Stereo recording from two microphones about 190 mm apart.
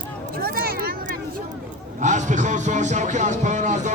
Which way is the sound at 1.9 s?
40° right (ahead or behind).